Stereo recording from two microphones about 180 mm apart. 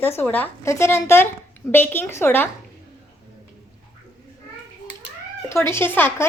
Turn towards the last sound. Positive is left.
turn(degrees=10)  # may be behind; listen again after turning